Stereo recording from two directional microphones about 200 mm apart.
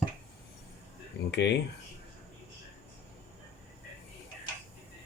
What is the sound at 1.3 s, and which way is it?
Speech, 60° left (ahead or behind).